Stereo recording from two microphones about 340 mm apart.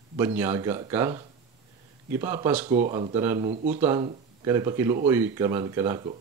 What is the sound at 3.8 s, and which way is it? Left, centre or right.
Speech, centre.